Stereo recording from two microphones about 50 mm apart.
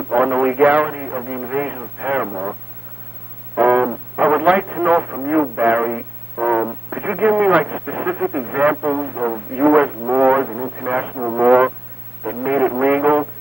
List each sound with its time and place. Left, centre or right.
0.0 s speech: centre
3.5 s speech: right